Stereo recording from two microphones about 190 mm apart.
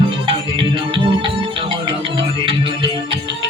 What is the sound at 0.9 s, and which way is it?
Music, 25° right (ahead or behind).